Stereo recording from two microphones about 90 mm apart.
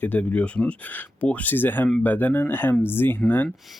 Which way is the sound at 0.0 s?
20° left (ahead or behind).